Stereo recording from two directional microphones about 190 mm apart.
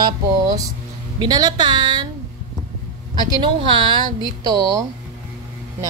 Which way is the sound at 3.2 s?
25° right (ahead or behind).